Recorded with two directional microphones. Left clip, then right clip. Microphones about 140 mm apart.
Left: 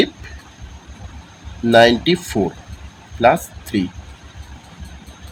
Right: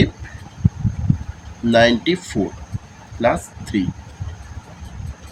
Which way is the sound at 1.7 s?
90° left.